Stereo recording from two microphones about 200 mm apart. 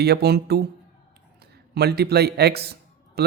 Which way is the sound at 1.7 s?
55° right (ahead or behind).